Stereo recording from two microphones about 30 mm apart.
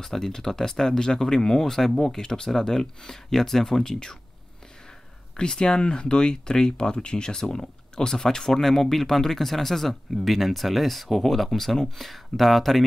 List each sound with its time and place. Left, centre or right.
0.0 s speech: centre
5.4 s speech: left
7.3 s speech: left; by 12.8 s centre